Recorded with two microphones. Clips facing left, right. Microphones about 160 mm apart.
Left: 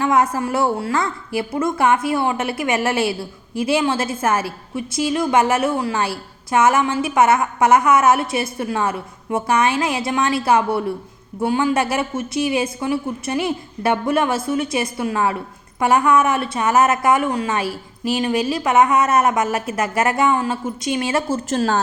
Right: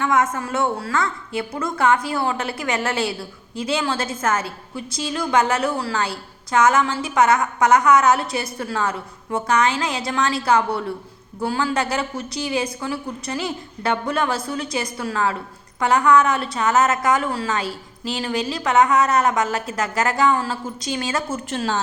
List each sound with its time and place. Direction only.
0.0 s a woman's voice: 30° left (ahead or behind)
17.6 s a woman's voice: 25° right (ahead or behind)
18.2 s a woman's voice: 20° left (ahead or behind); by 21.8 s 40° left (ahead or behind)